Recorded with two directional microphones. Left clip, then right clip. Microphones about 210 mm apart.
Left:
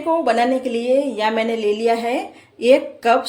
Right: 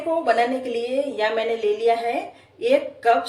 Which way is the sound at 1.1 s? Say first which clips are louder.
Left 3 dB; 50° left (ahead or behind).